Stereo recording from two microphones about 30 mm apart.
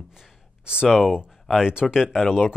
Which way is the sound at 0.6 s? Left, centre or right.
Right.